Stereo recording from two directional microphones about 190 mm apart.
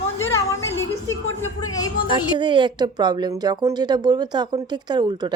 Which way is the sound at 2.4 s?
25° right (ahead or behind).